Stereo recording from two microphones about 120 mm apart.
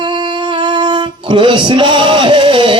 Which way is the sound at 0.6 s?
40° right (ahead or behind).